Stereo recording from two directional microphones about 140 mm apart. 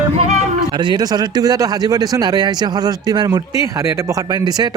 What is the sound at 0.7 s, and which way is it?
Speech, 35° right (ahead or behind).